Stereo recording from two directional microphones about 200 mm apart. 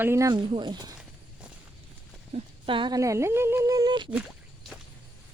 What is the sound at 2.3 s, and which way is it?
Speech, 25° right (ahead or behind).